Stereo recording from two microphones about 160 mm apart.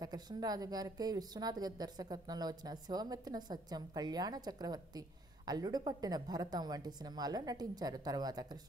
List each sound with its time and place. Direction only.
0.0 s a woman's voice: 25° right (ahead or behind)